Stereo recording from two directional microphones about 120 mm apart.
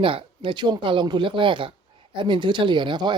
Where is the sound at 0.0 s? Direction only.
50° right (ahead or behind).